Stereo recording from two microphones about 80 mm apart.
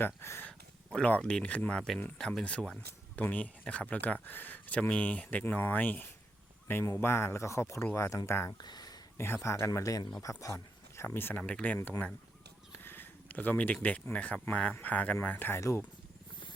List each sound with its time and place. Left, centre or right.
0.0 s speech: left
0.9 s speech: centre; by 8.2 s left
8.6 s a sound: left
9.1 s speech: left
12.7 s a sound: left
13.8 s speech: centre